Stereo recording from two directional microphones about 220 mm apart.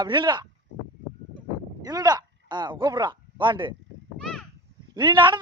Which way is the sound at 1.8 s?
15° right (ahead or behind).